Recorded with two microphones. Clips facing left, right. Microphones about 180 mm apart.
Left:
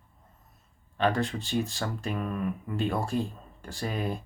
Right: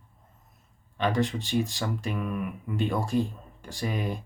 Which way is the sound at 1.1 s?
20° right (ahead or behind).